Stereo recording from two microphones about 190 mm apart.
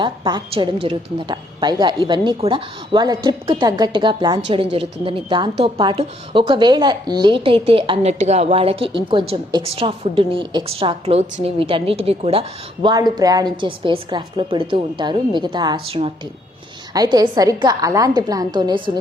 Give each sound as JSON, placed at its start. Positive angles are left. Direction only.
{"t": 0.0, "sound": "a woman's voice", "side_deg": -25}
{"t": 16.9, "sound": "a woman's voice", "side_deg": -20}